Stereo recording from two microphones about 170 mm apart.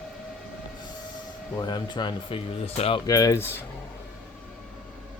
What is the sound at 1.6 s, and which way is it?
Speech, 25° left (ahead or behind).